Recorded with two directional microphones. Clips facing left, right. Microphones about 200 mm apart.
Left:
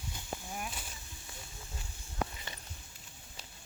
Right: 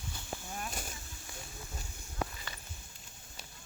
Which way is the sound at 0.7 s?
45° right (ahead or behind).